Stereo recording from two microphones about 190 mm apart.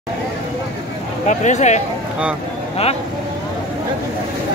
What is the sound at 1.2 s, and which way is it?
Speech, 40° left (ahead or behind).